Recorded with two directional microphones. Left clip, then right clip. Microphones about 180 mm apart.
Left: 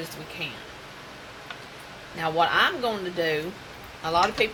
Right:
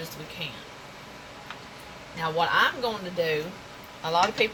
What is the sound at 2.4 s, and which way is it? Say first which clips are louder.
A woman's voice: left 1 dB; 30° left (ahead or behind).